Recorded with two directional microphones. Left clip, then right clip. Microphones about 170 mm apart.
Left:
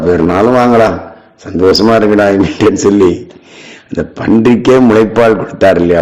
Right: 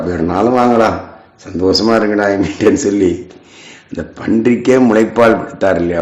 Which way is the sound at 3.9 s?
40° left (ahead or behind).